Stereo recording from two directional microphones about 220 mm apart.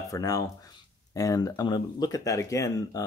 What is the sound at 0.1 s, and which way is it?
Speech, 15° left (ahead or behind).